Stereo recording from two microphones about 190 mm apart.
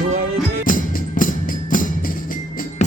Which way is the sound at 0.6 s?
45° left (ahead or behind).